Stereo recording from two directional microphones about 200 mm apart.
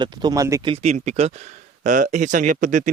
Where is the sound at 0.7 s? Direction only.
35° right (ahead or behind).